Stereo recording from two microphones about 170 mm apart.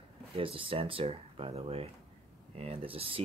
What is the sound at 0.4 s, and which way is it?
Speech, 30° right (ahead or behind).